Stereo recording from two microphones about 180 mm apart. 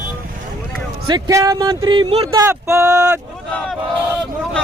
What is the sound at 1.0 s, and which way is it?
Speech, 20° right (ahead or behind).